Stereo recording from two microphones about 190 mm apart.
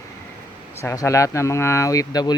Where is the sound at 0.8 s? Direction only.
15° left (ahead or behind).